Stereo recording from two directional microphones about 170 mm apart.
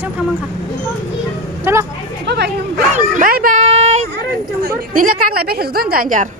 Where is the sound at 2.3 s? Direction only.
80° right.